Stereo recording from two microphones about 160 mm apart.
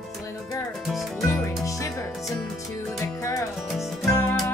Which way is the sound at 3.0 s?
20° left (ahead or behind).